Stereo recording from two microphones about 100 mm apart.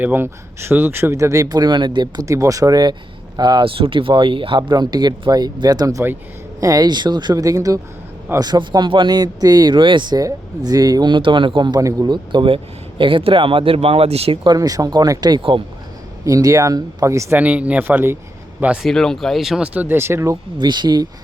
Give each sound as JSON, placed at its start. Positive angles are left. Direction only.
{"t": 0.0, "sound": "speech", "side_deg": -20}
{"t": 2.2, "sound": "speech", "side_deg": -30}
{"t": 3.6, "sound": "speech", "side_deg": -65}
{"t": 10.2, "sound": "speech", "side_deg": -40}
{"t": 11.8, "sound": "speech", "side_deg": -35}
{"t": 12.0, "sound": "speech", "side_deg": -50}
{"t": 14.4, "sound": "speech", "side_deg": -40}
{"t": 15.4, "sound": "speech", "side_deg": -60}
{"t": 16.2, "sound": "speech", "side_deg": -35}
{"t": 17.3, "sound": "speech", "side_deg": -15}
{"t": 18.8, "sound": "speech", "side_deg": 5}
{"t": 20.2, "sound": "speech", "side_deg": -45}